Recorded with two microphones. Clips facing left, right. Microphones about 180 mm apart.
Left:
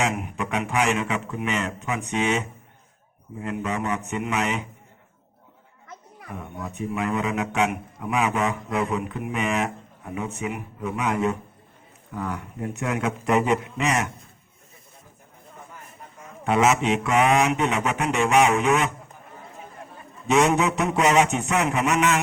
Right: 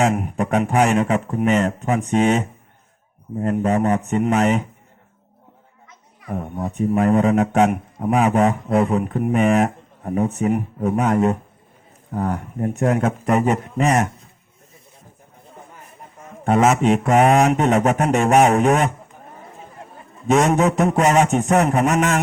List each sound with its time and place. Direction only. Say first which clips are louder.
0.0 s a man's voice: right 7 dB; 45° right (ahead or behind)
6.2 s a man's voice: right 9 dB; 45° right (ahead or behind)
16.4 s a man's voice: right 4 dB; 50° right (ahead or behind)
20.2 s a man's voice: right 4 dB; 45° right (ahead or behind)